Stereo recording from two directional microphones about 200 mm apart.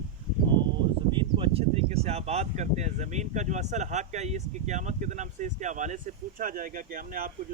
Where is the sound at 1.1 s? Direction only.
25° right (ahead or behind).